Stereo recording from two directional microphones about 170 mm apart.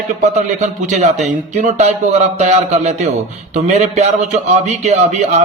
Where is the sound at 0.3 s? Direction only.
45° right (ahead or behind).